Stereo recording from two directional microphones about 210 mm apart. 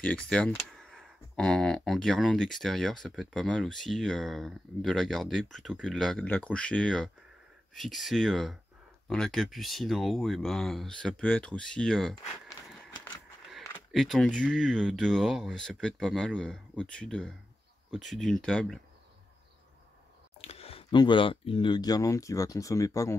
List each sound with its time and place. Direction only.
0.0 s speech: 5° left (ahead or behind)
13.5 s speech: centre (ahead or behind)
20.3 s speech: 30° left (ahead or behind)